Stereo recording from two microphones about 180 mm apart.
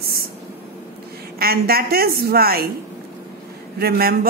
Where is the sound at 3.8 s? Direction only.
60° right (ahead or behind).